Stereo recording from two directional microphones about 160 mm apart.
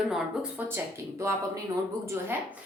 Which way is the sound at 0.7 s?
15° right (ahead or behind).